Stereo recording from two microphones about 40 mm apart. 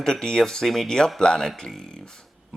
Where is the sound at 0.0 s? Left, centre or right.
Centre.